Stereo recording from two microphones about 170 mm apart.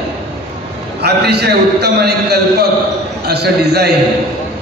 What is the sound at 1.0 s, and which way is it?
A man's voice, 75° right (ahead or behind).